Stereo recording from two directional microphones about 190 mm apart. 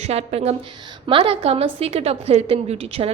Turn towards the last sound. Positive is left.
turn(degrees=-30)  # may be behind; listen again after turning